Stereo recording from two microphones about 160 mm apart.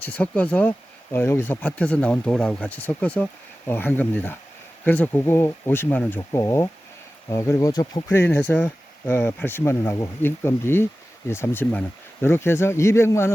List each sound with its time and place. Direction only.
0.0 s speech: 10° left (ahead or behind)